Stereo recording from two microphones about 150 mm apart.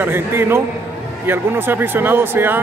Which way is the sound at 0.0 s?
15° right (ahead or behind).